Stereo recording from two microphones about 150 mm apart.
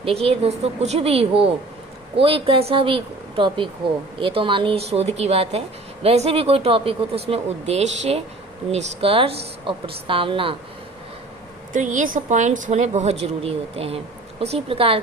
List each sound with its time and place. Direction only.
0.0 s speech: 40° right (ahead or behind)
11.7 s a woman's voice: 60° right (ahead or behind); by 15.0 s 40° right (ahead or behind)